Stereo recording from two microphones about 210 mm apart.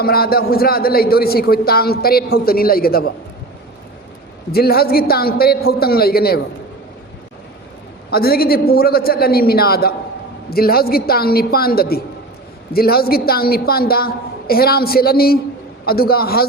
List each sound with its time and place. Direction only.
0.0 s a man's voice: 45° left (ahead or behind)
4.5 s a man's voice: 45° left (ahead or behind)
8.1 s a man's voice: 45° left (ahead or behind)